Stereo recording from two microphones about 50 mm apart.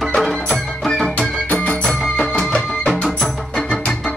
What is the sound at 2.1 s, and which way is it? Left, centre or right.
Music, centre.